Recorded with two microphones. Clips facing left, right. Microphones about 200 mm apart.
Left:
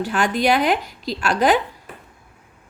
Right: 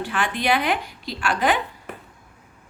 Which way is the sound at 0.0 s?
40° left (ahead or behind).